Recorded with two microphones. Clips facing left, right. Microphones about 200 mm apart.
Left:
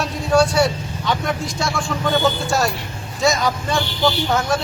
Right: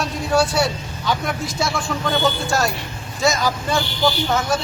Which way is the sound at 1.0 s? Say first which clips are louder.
Left 1 dB; 5° right (ahead or behind).